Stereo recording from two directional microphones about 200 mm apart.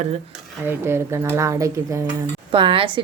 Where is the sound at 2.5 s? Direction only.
25° right (ahead or behind).